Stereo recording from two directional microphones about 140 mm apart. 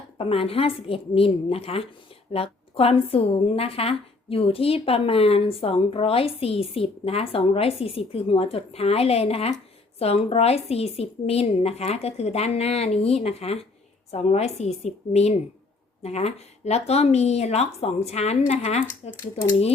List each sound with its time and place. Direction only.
0.2 s a woman's voice: 45° left (ahead or behind)